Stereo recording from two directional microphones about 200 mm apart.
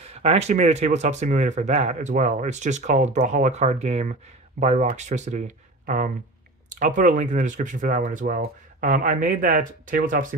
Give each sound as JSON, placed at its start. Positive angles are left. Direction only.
{"t": 0.0, "sound": "speech", "side_deg": -30}